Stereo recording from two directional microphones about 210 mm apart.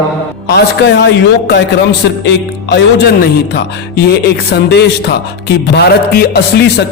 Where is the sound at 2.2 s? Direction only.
55° left (ahead or behind).